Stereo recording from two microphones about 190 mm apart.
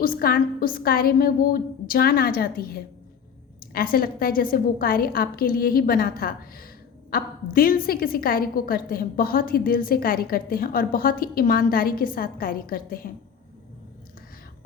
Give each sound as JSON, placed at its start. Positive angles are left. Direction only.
{"t": 0.0, "sound": "a woman's voice", "side_deg": 50}